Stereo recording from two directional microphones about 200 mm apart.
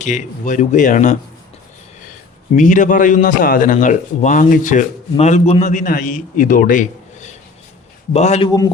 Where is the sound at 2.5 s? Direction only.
40° left (ahead or behind).